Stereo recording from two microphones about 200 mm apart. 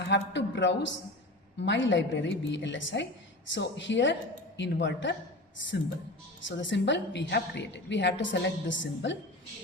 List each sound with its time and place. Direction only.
0.1 s a woman's voice: 60° left (ahead or behind)
6.4 s a woman's voice: 65° left (ahead or behind)